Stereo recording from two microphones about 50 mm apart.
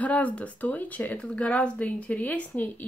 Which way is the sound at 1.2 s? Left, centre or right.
Left.